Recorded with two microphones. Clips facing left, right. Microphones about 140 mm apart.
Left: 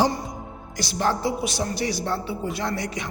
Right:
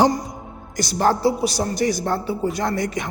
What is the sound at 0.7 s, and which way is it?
A woman's voice, 45° right (ahead or behind).